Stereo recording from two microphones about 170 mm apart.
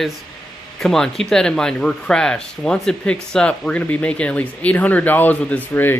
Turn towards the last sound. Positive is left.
turn(degrees=10)  # may be behind; listen again after turning